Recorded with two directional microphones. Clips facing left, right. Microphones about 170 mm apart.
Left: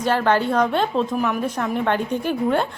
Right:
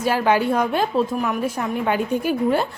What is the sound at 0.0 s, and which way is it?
A woman's voice, 10° right (ahead or behind).